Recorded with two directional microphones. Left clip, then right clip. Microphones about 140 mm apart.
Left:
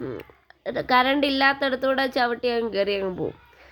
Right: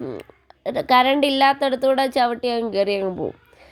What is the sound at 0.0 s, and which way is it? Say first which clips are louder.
A woman's voice: right 2 dB; 35° right (ahead or behind).